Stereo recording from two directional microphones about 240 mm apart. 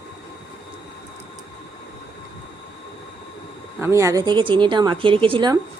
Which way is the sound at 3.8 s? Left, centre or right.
Centre.